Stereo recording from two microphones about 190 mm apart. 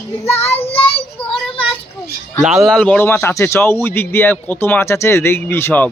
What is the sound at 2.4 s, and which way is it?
Speech, centre (ahead or behind).